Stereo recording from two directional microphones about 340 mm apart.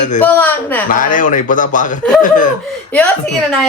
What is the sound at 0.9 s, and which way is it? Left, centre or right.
Speech, left.